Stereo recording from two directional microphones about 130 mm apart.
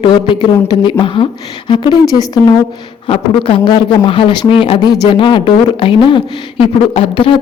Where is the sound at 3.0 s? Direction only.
40° left (ahead or behind).